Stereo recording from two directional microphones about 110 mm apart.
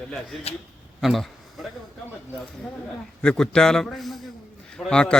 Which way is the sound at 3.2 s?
10° left (ahead or behind).